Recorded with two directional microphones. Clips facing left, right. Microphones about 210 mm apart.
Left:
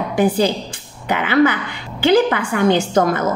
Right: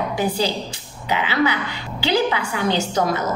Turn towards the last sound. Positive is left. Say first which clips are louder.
# left 5 dB
turn(degrees=50)  # may be behind; listen again after turning